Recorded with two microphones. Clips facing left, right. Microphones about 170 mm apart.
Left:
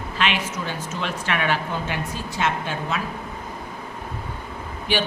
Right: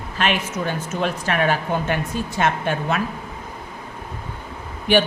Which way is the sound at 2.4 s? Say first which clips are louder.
Right 3 dB; 55° right (ahead or behind).